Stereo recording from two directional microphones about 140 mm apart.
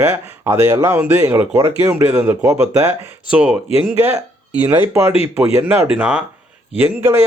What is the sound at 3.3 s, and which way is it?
Speech, 10° right (ahead or behind).